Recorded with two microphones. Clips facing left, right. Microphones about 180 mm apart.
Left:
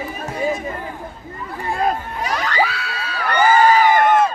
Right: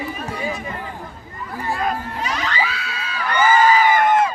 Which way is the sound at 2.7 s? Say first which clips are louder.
Left 2 dB; 40° left (ahead or behind).